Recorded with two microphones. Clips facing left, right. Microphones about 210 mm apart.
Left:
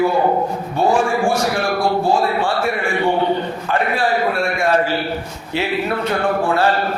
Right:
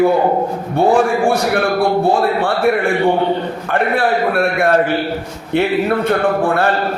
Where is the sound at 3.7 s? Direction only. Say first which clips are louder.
Right 3 dB; 60° right (ahead or behind).